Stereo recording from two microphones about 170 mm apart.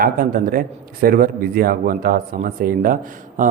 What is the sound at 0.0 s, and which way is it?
Speech, 55° right (ahead or behind).